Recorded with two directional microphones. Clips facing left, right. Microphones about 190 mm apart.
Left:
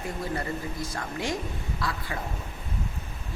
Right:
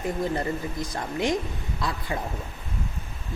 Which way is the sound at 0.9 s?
20° right (ahead or behind).